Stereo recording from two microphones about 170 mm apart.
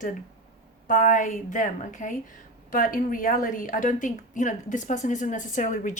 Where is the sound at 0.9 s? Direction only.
50° left (ahead or behind).